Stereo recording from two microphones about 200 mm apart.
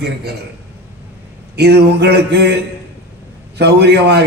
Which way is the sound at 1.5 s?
55° right (ahead or behind).